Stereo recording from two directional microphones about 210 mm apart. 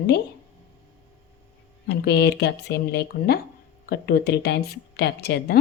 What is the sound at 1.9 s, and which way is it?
Speech, 50° left (ahead or behind).